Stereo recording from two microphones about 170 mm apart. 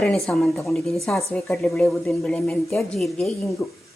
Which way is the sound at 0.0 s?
Centre (ahead or behind).